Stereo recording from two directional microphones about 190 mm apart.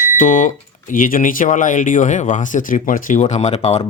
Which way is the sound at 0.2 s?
40° left (ahead or behind).